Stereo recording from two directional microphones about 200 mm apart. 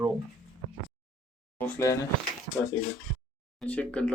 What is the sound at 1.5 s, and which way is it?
Speech, 10° left (ahead or behind).